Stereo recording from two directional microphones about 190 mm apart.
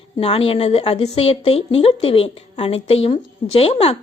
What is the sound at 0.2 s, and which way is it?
A woman's voice, 30° left (ahead or behind).